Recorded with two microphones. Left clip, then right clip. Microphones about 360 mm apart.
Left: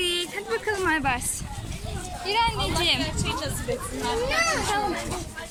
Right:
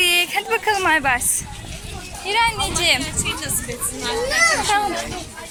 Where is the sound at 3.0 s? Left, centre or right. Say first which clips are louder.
Right 3 dB; left.